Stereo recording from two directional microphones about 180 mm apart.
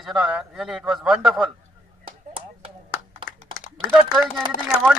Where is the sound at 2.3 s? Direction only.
30° right (ahead or behind).